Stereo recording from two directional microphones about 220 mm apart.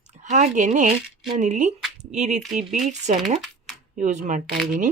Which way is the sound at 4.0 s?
35° right (ahead or behind).